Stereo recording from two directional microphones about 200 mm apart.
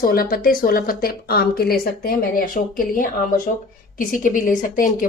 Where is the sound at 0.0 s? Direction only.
45° left (ahead or behind).